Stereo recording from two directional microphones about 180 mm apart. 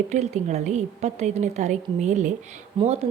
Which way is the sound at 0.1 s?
40° right (ahead or behind).